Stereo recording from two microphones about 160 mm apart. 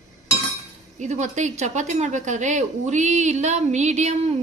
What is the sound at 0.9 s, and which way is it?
A woman's voice, 45° right (ahead or behind).